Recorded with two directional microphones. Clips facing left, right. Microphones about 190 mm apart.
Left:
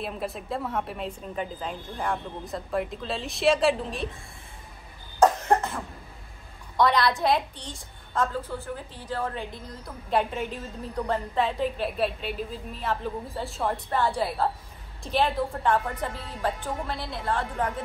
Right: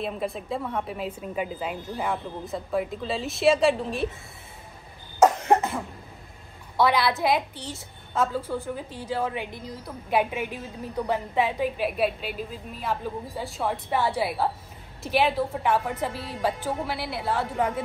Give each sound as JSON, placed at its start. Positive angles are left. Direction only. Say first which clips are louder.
{"t": 0.0, "sound": "a woman's voice", "louder": "right 3 dB", "side_deg": 0}
{"t": 5.2, "sound": "cough", "louder": "right 2 dB", "side_deg": -15}
{"t": 6.8, "sound": "a woman's voice", "louder": "even", "side_deg": -5}